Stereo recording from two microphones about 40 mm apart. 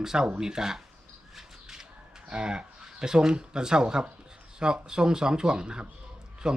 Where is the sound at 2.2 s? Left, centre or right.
Right.